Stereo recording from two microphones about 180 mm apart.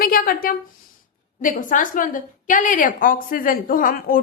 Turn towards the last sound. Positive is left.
turn(degrees=55)  # may be behind; listen again after turning